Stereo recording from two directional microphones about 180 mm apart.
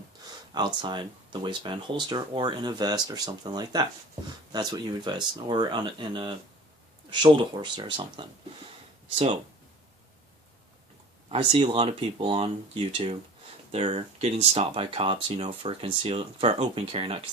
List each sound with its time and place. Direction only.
0.5 s speech: 25° right (ahead or behind)
11.3 s speech: 35° right (ahead or behind)